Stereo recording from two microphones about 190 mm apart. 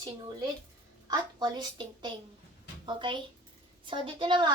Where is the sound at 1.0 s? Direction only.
20° right (ahead or behind).